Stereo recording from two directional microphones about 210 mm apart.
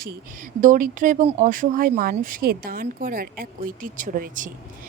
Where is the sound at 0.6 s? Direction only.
40° right (ahead or behind).